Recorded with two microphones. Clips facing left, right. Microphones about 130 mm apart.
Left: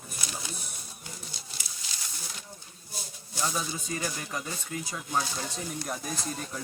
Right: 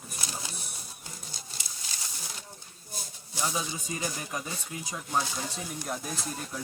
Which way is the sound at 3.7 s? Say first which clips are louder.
Left 1 dB; 15° right (ahead or behind).